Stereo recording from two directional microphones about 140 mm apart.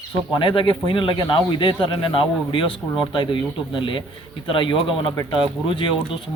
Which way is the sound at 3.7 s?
35° left (ahead or behind).